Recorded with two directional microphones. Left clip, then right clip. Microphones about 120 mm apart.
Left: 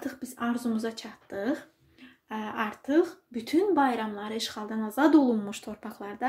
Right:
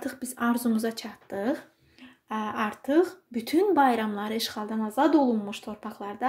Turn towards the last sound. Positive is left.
turn(degrees=-10)  # may be behind; listen again after turning